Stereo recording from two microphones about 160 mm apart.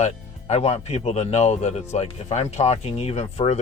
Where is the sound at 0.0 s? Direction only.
45° left (ahead or behind).